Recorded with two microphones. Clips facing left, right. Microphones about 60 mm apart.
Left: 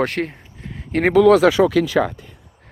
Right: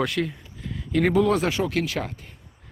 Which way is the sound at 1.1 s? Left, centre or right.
Left.